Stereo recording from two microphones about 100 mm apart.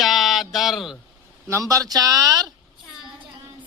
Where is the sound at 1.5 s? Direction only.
30° right (ahead or behind).